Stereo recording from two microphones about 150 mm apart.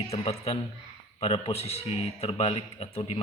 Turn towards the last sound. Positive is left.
turn(degrees=40)  # may be behind; listen again after turning